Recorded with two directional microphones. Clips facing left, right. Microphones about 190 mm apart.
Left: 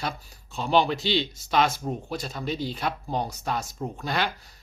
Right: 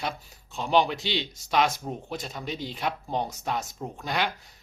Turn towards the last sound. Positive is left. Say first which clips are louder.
# left 1 dB
turn(degrees=-15)  # may be behind; listen again after turning